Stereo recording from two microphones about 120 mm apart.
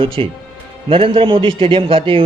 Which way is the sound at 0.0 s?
45° right (ahead or behind).